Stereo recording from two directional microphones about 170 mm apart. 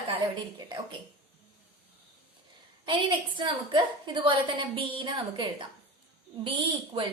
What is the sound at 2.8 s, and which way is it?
A woman's voice, 30° right (ahead or behind).